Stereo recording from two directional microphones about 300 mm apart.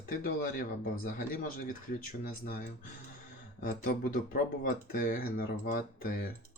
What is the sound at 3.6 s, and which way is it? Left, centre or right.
Speech, left.